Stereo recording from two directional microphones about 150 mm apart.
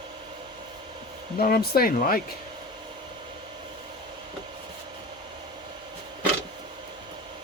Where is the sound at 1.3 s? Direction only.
85° left.